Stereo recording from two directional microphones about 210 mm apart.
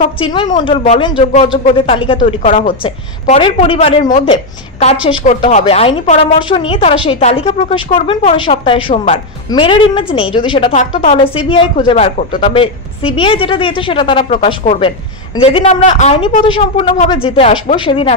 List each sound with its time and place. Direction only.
0.2 s a woman's voice: 25° left (ahead or behind)
2.4 s speech: 40° left (ahead or behind)
2.8 s a woman's voice: 25° left (ahead or behind)